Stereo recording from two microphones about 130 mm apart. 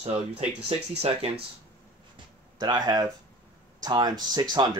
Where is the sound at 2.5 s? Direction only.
30° right (ahead or behind).